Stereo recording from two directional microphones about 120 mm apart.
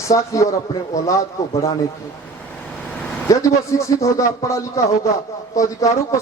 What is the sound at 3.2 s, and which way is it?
Speech, 25° left (ahead or behind).